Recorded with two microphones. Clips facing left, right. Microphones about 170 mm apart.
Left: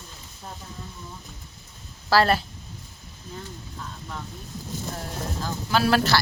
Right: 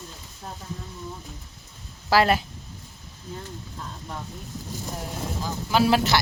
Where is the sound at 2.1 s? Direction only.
15° right (ahead or behind).